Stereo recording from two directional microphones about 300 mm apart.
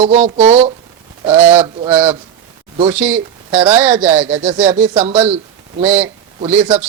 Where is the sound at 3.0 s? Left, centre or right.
Centre.